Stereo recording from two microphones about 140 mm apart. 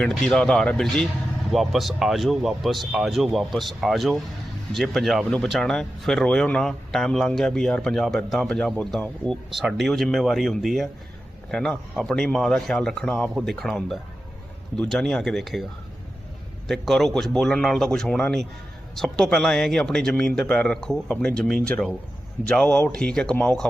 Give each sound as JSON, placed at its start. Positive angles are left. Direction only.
{"t": 0.0, "sound": "speech", "side_deg": 5}
{"t": 16.6, "sound": "speech", "side_deg": 0}